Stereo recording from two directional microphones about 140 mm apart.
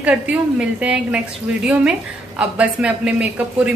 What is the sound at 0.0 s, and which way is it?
A woman's voice, 10° right (ahead or behind).